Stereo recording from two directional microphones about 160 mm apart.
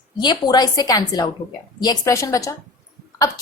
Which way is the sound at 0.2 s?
25° left (ahead or behind).